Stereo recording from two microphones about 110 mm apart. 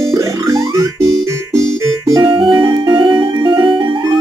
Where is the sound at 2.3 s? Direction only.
50° right (ahead or behind).